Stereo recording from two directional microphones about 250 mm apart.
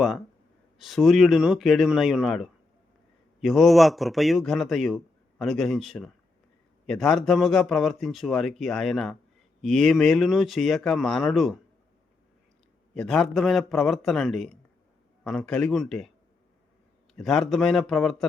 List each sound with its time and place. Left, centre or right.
0.8 s speech: centre
12.9 s a man's voice: centre
17.2 s speech: centre